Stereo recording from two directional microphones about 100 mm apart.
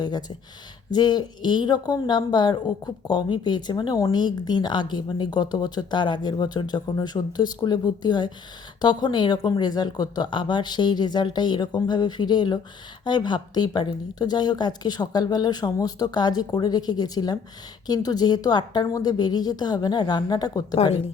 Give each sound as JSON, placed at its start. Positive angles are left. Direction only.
{"t": 0.0, "sound": "speech", "side_deg": 45}